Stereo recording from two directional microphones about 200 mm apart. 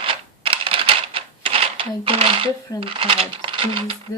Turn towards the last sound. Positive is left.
turn(degrees=-25)  # may be behind; listen again after turning